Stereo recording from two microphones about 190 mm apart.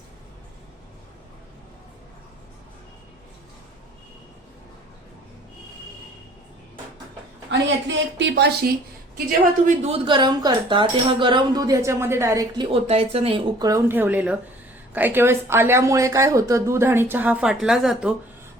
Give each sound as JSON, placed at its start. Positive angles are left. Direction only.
{"t": 7.9, "sound": "speech", "side_deg": -65}
{"t": 9.6, "sound": "speech", "side_deg": -35}
{"t": 12.7, "sound": "a woman's voice", "side_deg": -30}